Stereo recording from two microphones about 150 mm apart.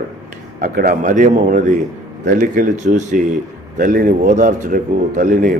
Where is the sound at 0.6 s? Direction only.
70° right (ahead or behind).